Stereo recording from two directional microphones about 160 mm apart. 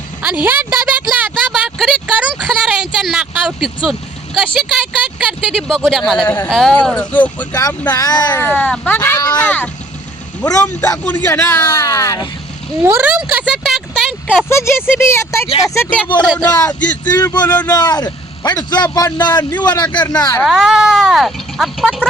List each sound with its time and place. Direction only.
0.4 s a sound: 10° right (ahead or behind)
2.4 s speech: 5° right (ahead or behind)
5.2 s speech: 5° right (ahead or behind)
6.2 s speech: 15° left (ahead or behind)
6.5 s speech: 5° left (ahead or behind)
7.5 s a man's voice: 20° left (ahead or behind)
8.4 s speech: 10° left (ahead or behind)
9.0 s speech: 20° left (ahead or behind)
10.4 s a man's voice: 25° left (ahead or behind)
11.0 s speech: 10° left (ahead or behind)
12.8 s speech: 15° right (ahead or behind)
14.5 s speech: 15° left (ahead or behind)
17.2 s a man's voice: 25° left (ahead or behind)
20.4 s speech: centre (ahead or behind)